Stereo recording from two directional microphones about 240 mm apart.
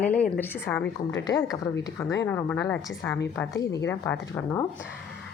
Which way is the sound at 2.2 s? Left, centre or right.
Centre.